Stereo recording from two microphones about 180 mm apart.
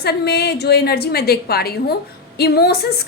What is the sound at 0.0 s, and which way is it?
A woman's voice, 60° left (ahead or behind).